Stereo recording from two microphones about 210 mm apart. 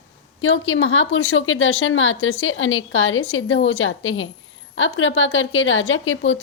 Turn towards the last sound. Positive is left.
turn(degrees=65)  # may be behind; listen again after turning